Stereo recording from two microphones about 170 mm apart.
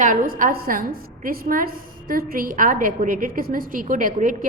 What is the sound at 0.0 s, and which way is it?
A woman's voice, 50° right (ahead or behind).